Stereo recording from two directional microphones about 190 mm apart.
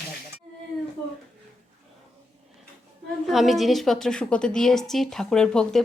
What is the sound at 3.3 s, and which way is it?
A woman's voice, centre (ahead or behind).